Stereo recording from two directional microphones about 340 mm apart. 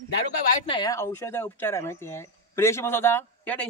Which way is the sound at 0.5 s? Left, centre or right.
Centre.